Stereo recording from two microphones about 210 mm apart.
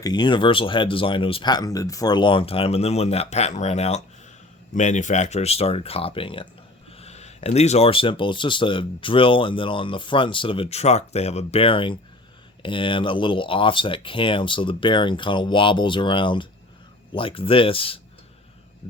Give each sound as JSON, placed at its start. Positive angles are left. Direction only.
{"t": 0.0, "sound": "speech", "side_deg": 20}